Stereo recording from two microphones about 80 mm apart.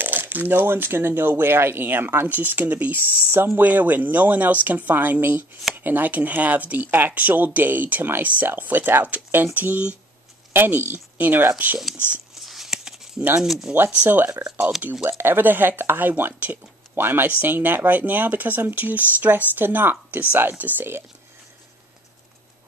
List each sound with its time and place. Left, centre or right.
0.0 s speech: right
12.4 s a sound: centre
13.4 s speech: centre
13.7 s speech: centre